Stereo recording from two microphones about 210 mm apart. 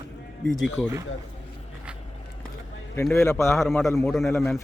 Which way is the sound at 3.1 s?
15° left (ahead or behind).